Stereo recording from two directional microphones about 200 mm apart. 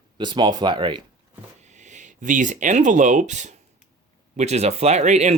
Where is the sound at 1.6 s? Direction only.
35° right (ahead or behind).